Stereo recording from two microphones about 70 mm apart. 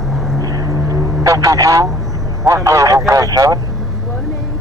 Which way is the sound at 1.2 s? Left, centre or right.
Right.